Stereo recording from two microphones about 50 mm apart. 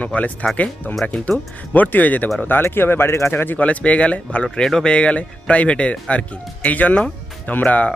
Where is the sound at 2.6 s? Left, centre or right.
Left.